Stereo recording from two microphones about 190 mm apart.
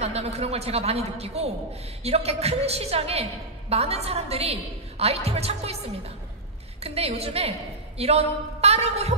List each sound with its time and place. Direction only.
0.0 s a woman's voice: 35° right (ahead or behind)
6.8 s a woman's voice: 30° right (ahead or behind)